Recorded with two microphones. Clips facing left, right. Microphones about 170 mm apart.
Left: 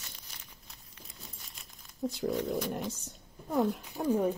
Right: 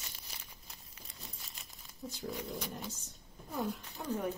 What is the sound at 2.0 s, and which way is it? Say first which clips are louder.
Speech: left 10 dB; 70° left (ahead or behind).